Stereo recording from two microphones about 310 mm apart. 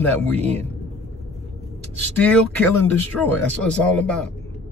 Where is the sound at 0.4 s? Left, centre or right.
Right.